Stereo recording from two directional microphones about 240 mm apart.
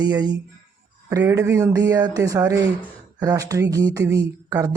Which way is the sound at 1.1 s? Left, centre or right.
Centre.